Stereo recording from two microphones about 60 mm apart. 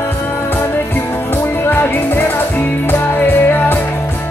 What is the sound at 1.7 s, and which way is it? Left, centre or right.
Music, left.